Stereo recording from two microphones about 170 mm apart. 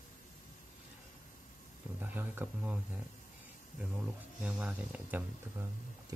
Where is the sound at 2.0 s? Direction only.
10° right (ahead or behind).